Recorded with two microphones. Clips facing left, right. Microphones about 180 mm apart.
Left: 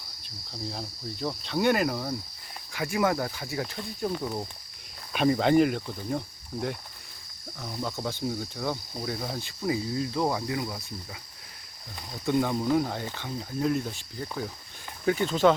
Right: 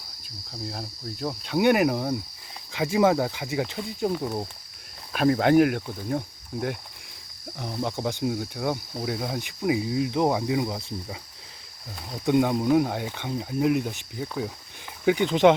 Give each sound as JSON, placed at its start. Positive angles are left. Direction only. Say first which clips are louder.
{"t": 0.6, "sound": "speech", "louder": "right 1 dB", "side_deg": -5}
{"t": 5.1, "sound": "speech", "louder": "right 3 dB", "side_deg": 0}
{"t": 7.6, "sound": "speech", "louder": "right 4 dB", "side_deg": -20}
{"t": 12.2, "sound": "speech", "louder": "right 4 dB", "side_deg": -15}